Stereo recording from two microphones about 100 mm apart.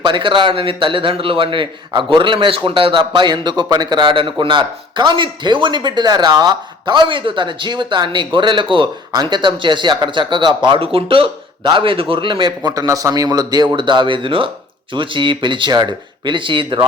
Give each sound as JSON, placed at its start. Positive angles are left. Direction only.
{"t": 0.0, "sound": "a man's voice", "side_deg": -55}
{"t": 13.7, "sound": "speech", "side_deg": -55}